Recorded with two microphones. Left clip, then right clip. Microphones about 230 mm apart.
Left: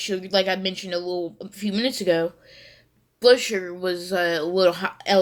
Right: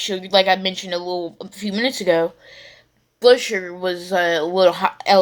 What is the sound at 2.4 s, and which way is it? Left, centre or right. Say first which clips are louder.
A woman's voice: right 5 dB; centre.